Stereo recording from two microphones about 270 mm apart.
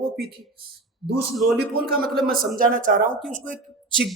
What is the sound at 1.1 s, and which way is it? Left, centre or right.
Speech, right.